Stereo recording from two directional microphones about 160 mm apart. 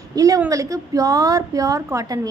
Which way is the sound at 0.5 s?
20° right (ahead or behind).